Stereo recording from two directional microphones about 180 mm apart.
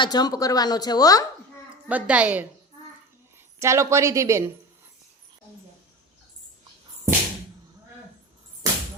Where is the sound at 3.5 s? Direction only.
15° right (ahead or behind).